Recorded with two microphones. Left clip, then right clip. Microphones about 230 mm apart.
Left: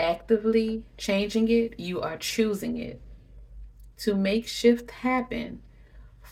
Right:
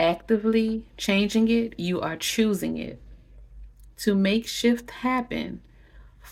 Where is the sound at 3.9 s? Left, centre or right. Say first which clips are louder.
Right 2 dB; right.